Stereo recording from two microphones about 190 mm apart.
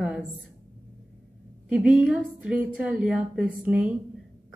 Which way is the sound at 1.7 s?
5° right (ahead or behind).